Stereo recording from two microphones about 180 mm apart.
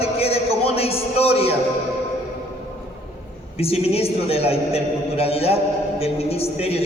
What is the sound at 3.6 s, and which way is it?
A man's voice, 35° left (ahead or behind).